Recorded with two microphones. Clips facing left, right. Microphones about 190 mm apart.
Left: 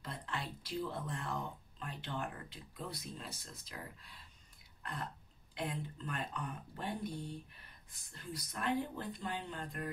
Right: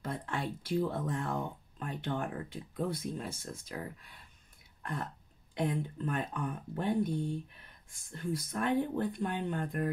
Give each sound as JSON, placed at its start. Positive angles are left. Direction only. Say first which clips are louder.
{"t": 0.0, "sound": "speech", "louder": "right 7 dB", "side_deg": -50}
{"t": 5.6, "sound": "speech", "louder": "right 8 dB", "side_deg": -50}